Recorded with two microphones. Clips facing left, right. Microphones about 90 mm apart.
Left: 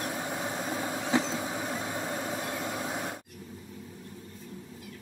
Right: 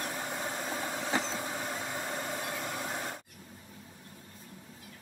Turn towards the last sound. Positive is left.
turn(degrees=5)  # may be behind; listen again after turning